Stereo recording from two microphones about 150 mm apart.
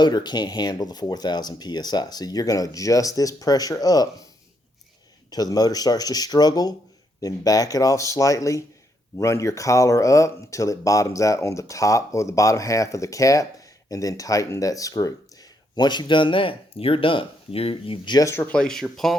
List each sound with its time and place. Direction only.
0.0 s speech: 30° left (ahead or behind)
5.3 s speech: 25° left (ahead or behind); by 19.1 s 5° left (ahead or behind)